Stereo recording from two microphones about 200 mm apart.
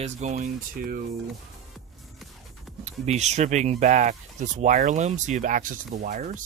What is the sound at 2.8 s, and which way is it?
Speech, 35° right (ahead or behind).